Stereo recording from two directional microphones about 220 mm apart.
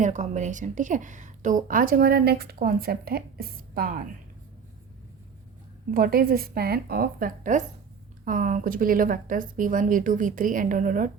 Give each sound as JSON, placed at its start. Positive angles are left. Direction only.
{"t": 0.0, "sound": "speech", "side_deg": -35}
{"t": 5.9, "sound": "speech", "side_deg": -40}